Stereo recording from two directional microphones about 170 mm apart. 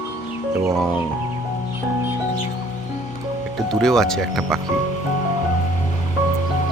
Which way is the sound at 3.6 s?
Centre (ahead or behind).